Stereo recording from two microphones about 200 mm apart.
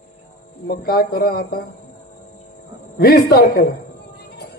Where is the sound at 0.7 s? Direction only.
50° left (ahead or behind).